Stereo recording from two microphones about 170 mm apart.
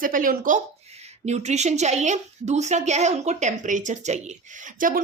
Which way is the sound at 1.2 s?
40° right (ahead or behind).